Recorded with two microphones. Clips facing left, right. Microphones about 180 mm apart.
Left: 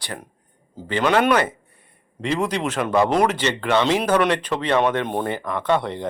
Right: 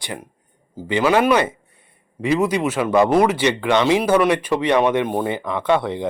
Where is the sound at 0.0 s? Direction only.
15° right (ahead or behind).